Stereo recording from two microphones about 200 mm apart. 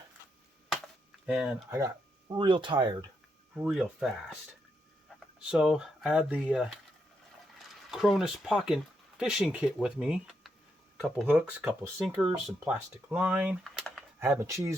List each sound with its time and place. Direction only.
1.3 s speech: 5° right (ahead or behind)
2.3 s speech: 25° right (ahead or behind)
3.5 s speech: 5° right (ahead or behind)
7.9 s speech: centre (ahead or behind)
14.2 s speech: 10° right (ahead or behind)